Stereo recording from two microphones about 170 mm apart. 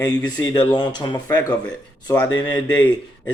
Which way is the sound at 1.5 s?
5° left (ahead or behind).